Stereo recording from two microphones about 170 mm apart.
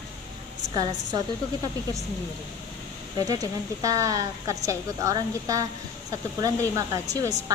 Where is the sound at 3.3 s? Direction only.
20° right (ahead or behind).